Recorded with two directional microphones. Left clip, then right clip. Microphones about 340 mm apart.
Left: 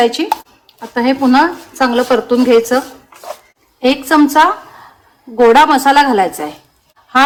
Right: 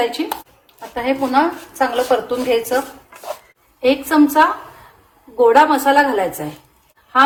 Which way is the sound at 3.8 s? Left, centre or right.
Left.